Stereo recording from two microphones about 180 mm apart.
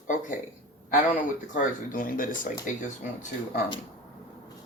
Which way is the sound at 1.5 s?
50° left (ahead or behind).